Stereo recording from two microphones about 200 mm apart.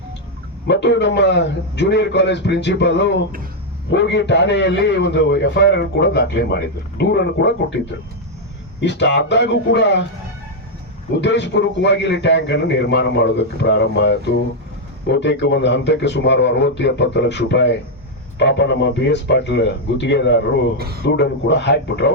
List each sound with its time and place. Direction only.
0.7 s a man's voice: 60° left (ahead or behind)
8.8 s a man's voice: 60° left (ahead or behind)
11.2 s a man's voice: 60° left (ahead or behind)
20.7 s speech: 50° right (ahead or behind)
21.0 s a man's voice: 60° left (ahead or behind)